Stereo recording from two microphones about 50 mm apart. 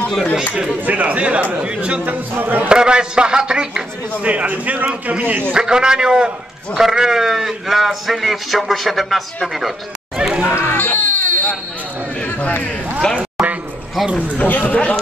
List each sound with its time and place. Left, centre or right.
0.1 s a man's voice: centre
0.7 s a man's voice: right
2.3 s a man's voice: right
2.7 s a man's voice: centre; by 5.4 s right
5.5 s a man's voice: centre
10.1 s chatter: centre
10.5 s speech: left
10.8 s a sound: left
13.2 s a sound: right
14.1 s speech: left